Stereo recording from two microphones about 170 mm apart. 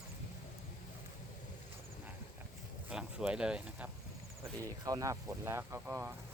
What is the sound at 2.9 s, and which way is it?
Speech, 5° right (ahead or behind).